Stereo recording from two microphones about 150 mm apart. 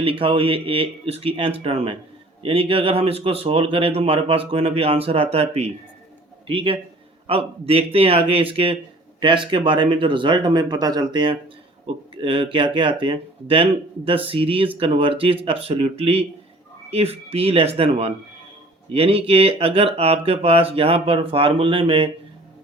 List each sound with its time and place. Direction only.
0.0 s speech: 40° right (ahead or behind)